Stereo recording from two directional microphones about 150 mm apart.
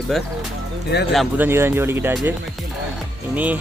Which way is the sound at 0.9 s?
90° left.